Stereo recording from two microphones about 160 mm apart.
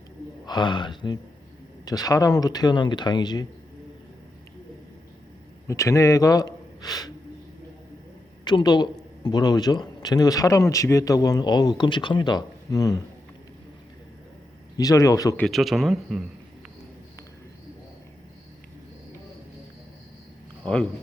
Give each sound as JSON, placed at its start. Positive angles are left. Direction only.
{"t": 0.4, "sound": "a man's voice", "side_deg": 30}
{"t": 5.6, "sound": "a man's voice", "side_deg": 20}
{"t": 8.4, "sound": "a man's voice", "side_deg": 25}
{"t": 14.8, "sound": "a man's voice", "side_deg": 20}
{"t": 15.4, "sound": "speech", "side_deg": 0}